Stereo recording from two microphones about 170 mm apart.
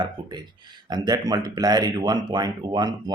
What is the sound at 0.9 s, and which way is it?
Speech, 25° right (ahead or behind).